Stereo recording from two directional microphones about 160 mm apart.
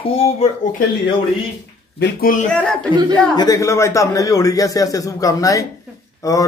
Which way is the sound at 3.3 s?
20° left (ahead or behind).